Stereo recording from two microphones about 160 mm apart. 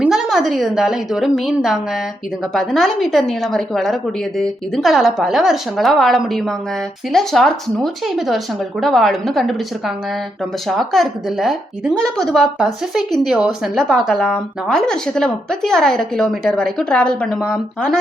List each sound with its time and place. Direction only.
0.0 s a woman's voice: 5° right (ahead or behind)